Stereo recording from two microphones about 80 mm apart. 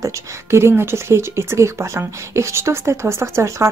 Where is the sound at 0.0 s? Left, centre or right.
Right.